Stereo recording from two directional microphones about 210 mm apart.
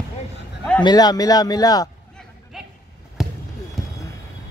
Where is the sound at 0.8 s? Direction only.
20° left (ahead or behind).